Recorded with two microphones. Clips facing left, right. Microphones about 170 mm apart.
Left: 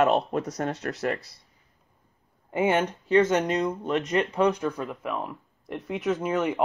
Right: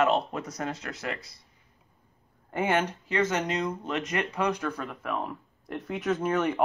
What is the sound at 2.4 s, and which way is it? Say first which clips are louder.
Speech: left 3 dB; 15° left (ahead or behind).